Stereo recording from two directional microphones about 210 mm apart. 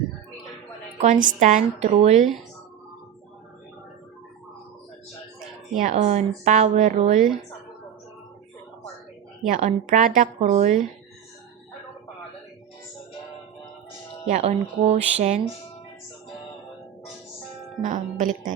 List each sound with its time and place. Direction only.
0.9 s speech: 35° right (ahead or behind)
5.8 s speech: 30° right (ahead or behind)
9.5 s speech: 35° right (ahead or behind)
14.3 s speech: 30° right (ahead or behind)
17.7 s speech: 35° right (ahead or behind)